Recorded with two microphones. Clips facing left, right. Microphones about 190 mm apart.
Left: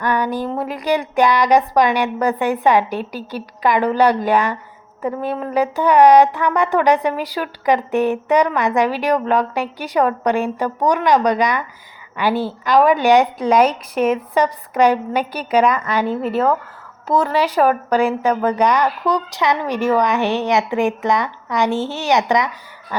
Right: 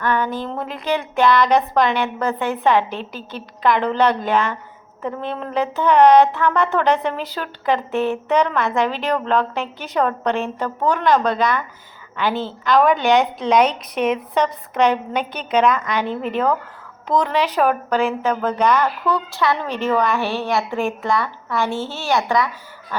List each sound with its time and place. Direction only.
0.0 s a woman's voice: 15° left (ahead or behind)